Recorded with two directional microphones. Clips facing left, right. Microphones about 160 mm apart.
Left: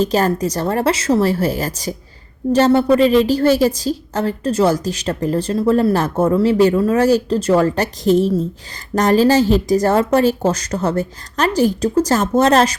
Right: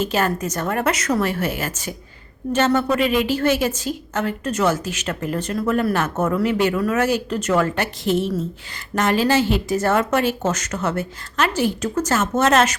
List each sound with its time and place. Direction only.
0.0 s a woman's voice: 35° left (ahead or behind)